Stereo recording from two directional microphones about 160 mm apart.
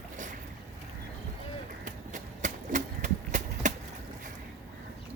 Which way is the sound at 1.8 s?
55° right (ahead or behind).